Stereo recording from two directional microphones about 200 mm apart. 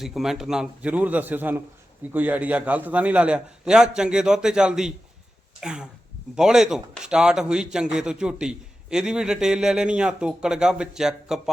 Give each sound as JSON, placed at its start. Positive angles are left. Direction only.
{"t": 0.0, "sound": "a man's voice", "side_deg": 0}